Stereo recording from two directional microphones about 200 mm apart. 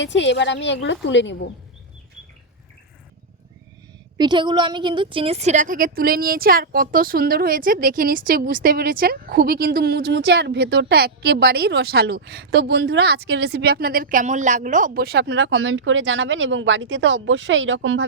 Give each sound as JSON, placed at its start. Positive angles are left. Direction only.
{"t": 0.0, "sound": "a woman's voice", "side_deg": 65}
{"t": 4.2, "sound": "a woman's voice", "side_deg": -20}